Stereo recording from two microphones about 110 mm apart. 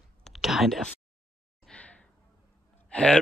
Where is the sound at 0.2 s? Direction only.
Centre (ahead or behind).